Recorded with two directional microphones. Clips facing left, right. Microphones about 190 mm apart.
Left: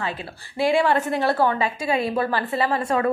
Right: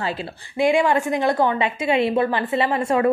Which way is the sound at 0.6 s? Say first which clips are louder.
Right 2 dB; 15° right (ahead or behind).